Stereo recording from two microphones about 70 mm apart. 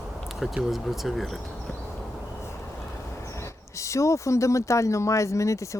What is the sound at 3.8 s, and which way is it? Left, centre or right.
Speech, left.